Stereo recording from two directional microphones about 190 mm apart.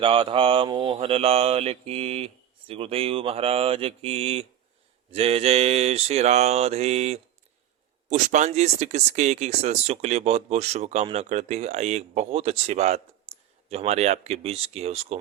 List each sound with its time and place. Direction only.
0.0 s speech: 30° right (ahead or behind)